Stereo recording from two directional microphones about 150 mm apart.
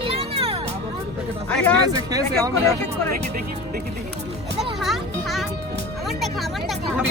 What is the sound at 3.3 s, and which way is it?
Speech, 85° right.